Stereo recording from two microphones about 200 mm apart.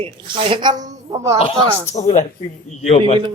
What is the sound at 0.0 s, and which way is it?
A man's voice, 25° right (ahead or behind).